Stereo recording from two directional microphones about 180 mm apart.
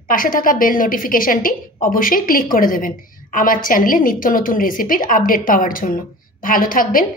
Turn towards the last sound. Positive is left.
turn(degrees=50)  # may be behind; listen again after turning